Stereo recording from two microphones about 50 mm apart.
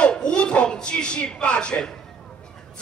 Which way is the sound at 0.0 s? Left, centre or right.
Centre.